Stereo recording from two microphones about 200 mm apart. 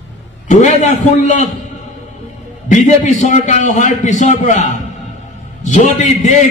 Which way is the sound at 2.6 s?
40° left (ahead or behind).